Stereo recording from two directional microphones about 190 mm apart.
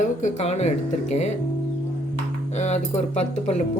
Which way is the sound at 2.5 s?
35° left (ahead or behind).